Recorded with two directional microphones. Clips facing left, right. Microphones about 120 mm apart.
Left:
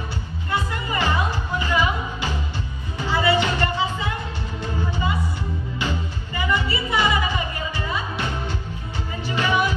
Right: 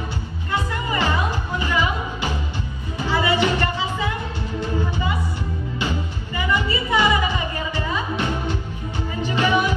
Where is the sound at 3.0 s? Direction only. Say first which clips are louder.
Even; 15° right (ahead or behind).